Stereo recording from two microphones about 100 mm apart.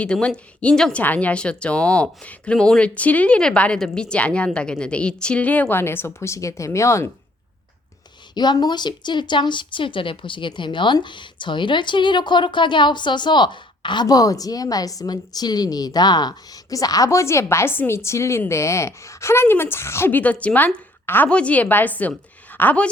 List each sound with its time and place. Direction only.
0.0 s speech: 10° left (ahead or behind); by 7.1 s 30° left (ahead or behind)
8.4 s a woman's voice: 45° left (ahead or behind); by 22.9 s 15° left (ahead or behind)